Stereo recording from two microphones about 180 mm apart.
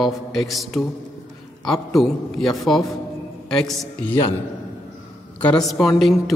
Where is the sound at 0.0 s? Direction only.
Centre (ahead or behind).